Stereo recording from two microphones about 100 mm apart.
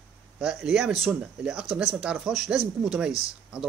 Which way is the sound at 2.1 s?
Centre (ahead or behind).